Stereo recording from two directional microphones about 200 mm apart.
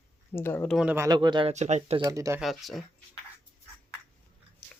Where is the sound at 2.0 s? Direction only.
15° right (ahead or behind).